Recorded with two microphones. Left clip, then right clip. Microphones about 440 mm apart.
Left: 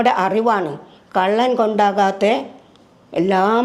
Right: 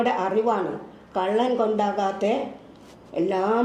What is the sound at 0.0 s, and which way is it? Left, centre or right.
Speech, left.